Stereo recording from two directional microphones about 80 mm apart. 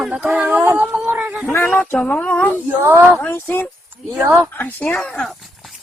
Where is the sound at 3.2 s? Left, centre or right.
Left.